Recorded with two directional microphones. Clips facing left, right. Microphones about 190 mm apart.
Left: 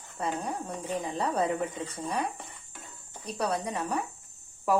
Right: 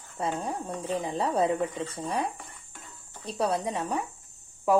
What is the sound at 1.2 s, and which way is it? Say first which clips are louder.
Speech: right 3 dB; 30° right (ahead or behind).